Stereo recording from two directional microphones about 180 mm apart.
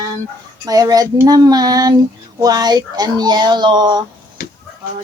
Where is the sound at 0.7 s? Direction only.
20° right (ahead or behind).